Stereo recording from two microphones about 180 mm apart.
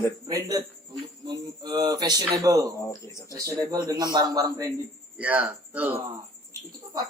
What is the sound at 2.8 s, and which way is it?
Speech, 15° left (ahead or behind).